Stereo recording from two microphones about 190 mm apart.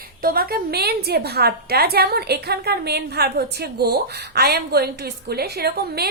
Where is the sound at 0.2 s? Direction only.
55° right (ahead or behind).